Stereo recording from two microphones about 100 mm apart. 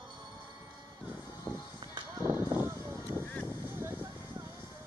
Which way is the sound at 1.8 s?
45° right (ahead or behind).